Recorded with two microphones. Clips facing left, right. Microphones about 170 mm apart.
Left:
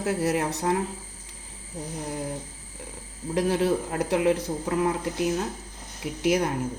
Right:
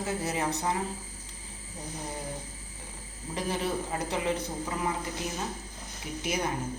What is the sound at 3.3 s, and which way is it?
Speech, 90° left.